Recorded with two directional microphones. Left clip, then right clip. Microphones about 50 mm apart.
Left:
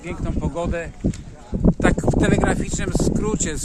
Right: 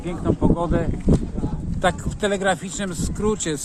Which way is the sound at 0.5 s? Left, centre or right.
Centre.